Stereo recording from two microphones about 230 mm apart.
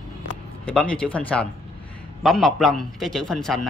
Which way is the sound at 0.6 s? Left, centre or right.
Centre.